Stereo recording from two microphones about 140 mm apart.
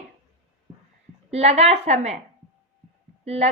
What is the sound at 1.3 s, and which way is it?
Speech, 50° right (ahead or behind).